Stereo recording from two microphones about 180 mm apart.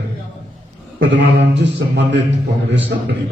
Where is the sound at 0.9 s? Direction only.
85° right.